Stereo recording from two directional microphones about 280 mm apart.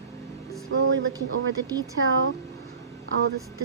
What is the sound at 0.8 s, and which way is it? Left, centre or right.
A woman's voice, right.